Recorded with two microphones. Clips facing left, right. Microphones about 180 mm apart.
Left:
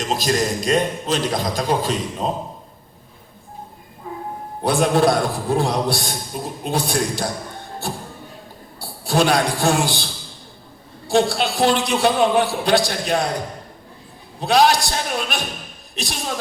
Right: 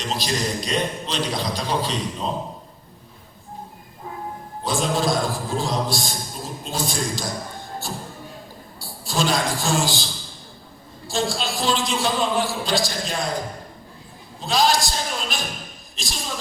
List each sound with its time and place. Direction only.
0.0 s a man's voice: 45° left (ahead or behind)
4.6 s a man's voice: 60° left (ahead or behind)
11.1 s a man's voice: 65° left (ahead or behind)
14.3 s a man's voice: 65° left (ahead or behind)